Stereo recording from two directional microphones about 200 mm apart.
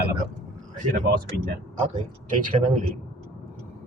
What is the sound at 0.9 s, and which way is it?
Speech, 45° right (ahead or behind).